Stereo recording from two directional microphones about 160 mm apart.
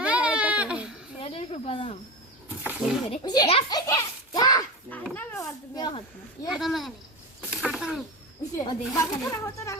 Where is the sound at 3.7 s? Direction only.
25° left (ahead or behind).